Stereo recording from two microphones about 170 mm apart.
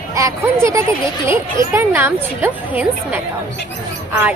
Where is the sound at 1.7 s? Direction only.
15° right (ahead or behind).